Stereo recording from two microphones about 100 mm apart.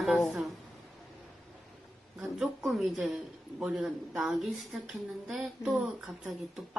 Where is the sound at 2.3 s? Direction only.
5° right (ahead or behind).